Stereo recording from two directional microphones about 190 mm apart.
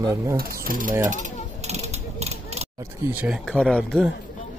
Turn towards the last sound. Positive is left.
turn(degrees=5)  # may be behind; listen again after turning